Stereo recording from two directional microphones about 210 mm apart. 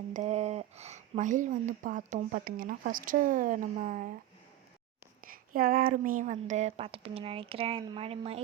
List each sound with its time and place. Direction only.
0.1 s speech: 35° right (ahead or behind)
5.2 s speech: 45° right (ahead or behind); by 8.4 s 25° right (ahead or behind)